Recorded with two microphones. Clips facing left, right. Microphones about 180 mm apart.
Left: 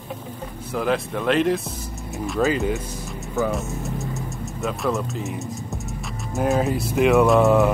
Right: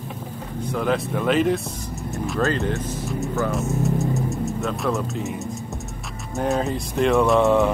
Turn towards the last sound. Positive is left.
turn(degrees=0)  # may be behind; listen again after turning